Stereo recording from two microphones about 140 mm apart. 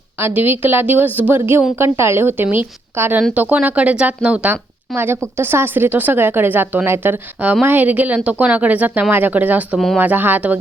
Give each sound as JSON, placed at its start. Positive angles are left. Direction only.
{"t": 0.2, "sound": "a woman's voice", "side_deg": -15}